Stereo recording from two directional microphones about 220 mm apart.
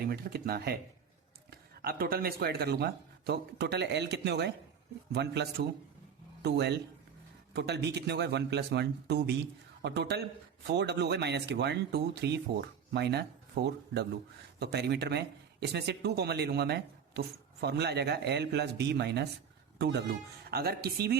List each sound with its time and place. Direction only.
0.1 s speech: 45° right (ahead or behind)